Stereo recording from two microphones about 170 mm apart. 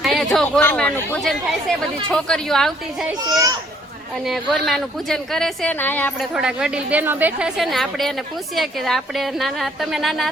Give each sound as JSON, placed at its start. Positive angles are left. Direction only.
{"t": 0.0, "sound": "a sound", "side_deg": 0}
{"t": 0.3, "sound": "a woman's voice", "side_deg": 5}
{"t": 3.2, "sound": "speech", "side_deg": -20}
{"t": 4.3, "sound": "a woman's voice", "side_deg": 0}
{"t": 6.3, "sound": "a woman's voice", "side_deg": -5}